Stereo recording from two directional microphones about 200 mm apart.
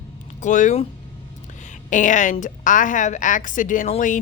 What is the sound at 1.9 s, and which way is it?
Speech, 40° left (ahead or behind).